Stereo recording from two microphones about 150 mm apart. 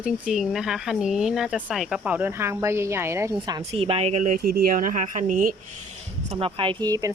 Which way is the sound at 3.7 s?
40° right (ahead or behind).